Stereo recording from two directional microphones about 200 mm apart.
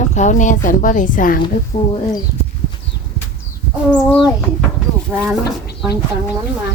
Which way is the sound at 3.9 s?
5° left (ahead or behind).